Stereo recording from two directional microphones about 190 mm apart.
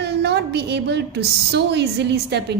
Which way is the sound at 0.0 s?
60° right (ahead or behind).